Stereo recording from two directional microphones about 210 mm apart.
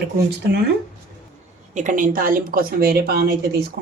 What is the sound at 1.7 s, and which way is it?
Speech, 35° right (ahead or behind).